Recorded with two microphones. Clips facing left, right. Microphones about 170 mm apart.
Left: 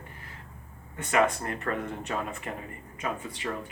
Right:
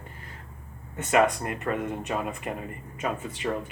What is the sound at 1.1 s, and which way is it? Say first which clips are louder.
Speech: right 3 dB; 20° right (ahead or behind).